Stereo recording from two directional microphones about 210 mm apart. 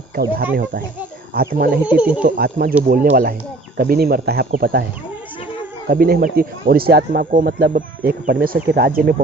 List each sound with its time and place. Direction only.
0.5 s speech: 45° right (ahead or behind)
1.9 s speech: 5° right (ahead or behind)
2.2 s speech: 45° right (ahead or behind)
5.9 s speech: 45° right (ahead or behind)